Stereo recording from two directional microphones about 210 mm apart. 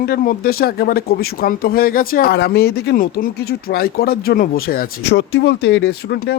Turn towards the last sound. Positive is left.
turn(degrees=55)  # may be behind; listen again after turning